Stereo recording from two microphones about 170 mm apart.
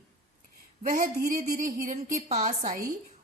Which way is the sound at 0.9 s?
55° right (ahead or behind).